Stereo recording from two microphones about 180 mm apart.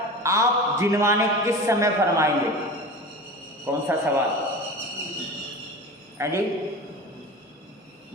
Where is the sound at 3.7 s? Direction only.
15° right (ahead or behind).